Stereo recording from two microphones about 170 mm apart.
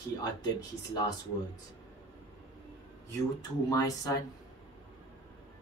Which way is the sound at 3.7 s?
20° left (ahead or behind).